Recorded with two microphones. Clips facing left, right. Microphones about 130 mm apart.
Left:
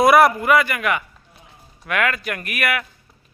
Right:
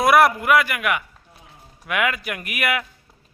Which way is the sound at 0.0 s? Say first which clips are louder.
Left 2 dB; centre (ahead or behind).